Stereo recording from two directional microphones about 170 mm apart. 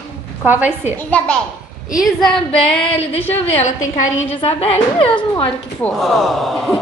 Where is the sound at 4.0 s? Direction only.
40° left (ahead or behind).